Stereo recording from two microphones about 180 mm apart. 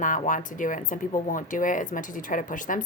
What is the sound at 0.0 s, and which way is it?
A woman's voice, 45° left (ahead or behind).